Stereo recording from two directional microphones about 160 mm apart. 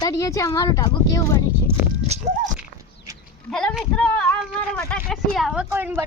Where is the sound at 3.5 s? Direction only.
5° left (ahead or behind).